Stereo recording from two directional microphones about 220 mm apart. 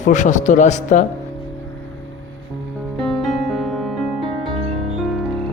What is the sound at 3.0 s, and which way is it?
Music, centre (ahead or behind).